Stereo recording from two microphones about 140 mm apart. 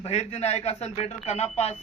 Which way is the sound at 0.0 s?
45° left (ahead or behind).